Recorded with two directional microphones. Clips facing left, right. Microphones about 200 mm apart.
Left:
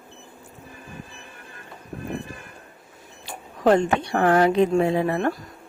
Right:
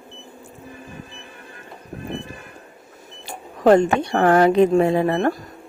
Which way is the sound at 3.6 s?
45° right (ahead or behind).